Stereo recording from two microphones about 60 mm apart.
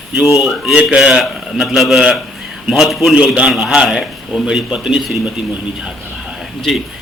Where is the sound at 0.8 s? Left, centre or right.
Centre.